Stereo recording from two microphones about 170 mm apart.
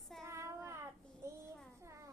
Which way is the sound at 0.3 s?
15° right (ahead or behind).